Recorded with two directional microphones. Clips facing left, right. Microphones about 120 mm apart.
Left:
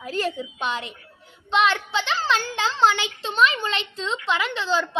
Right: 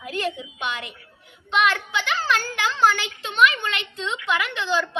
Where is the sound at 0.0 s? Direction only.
35° left (ahead or behind).